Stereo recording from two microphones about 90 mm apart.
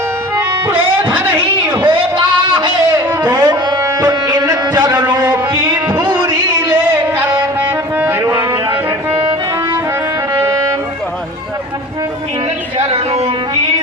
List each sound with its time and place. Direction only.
0.3 s music: 20° right (ahead or behind)
1.8 s a sound: 65° right (ahead or behind)
3.2 s music: 50° right (ahead or behind)
5.7 s a sound: 25° right (ahead or behind)
7.9 s music: 25° right (ahead or behind)
10.3 s music: 35° right (ahead or behind)